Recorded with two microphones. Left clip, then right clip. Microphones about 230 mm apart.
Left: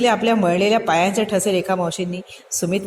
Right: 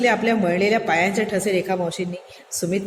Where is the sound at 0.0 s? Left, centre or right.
Left.